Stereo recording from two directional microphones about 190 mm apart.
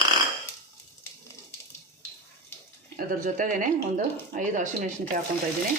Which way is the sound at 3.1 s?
45° right (ahead or behind).